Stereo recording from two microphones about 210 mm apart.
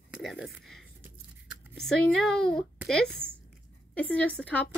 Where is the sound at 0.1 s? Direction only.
Centre (ahead or behind).